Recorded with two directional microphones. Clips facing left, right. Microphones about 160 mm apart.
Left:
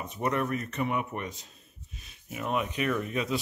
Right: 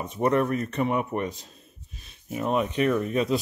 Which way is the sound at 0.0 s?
35° right (ahead or behind).